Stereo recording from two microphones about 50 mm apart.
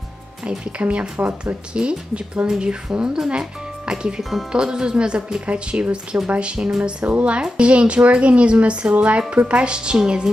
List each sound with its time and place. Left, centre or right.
0.5 s speech: right
4.2 s speech: centre
4.5 s speech: centre